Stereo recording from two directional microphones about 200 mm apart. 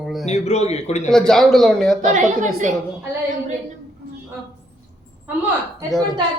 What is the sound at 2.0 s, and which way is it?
Speech, 40° right (ahead or behind).